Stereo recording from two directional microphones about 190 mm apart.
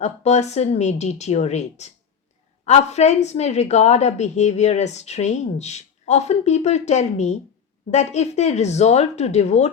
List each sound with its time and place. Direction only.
0.0 s a woman's voice: 35° left (ahead or behind)